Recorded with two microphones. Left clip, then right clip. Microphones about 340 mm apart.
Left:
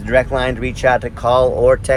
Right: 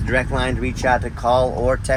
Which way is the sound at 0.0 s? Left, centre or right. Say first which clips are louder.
Left 6 dB; left.